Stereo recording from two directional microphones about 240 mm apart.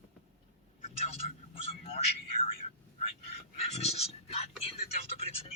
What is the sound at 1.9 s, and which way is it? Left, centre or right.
Speech, left.